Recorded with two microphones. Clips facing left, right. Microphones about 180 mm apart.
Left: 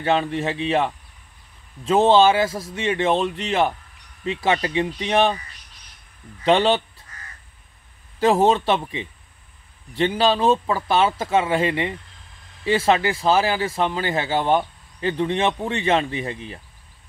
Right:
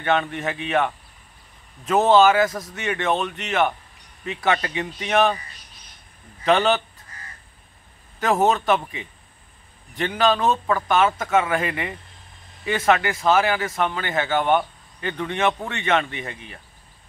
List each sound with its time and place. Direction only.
0.0 s speech: 30° left (ahead or behind)
6.4 s speech: 30° left (ahead or behind)
8.2 s speech: 30° left (ahead or behind)